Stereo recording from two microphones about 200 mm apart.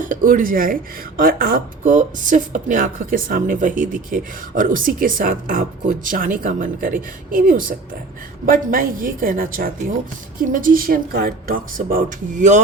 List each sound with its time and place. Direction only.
0.0 s speech: 45° right (ahead or behind)